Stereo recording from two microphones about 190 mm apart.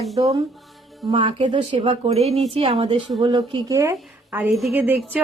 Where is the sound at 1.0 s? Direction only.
25° right (ahead or behind).